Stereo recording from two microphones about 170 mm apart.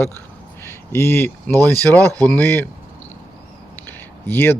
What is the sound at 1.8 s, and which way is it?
Speech, 10° left (ahead or behind).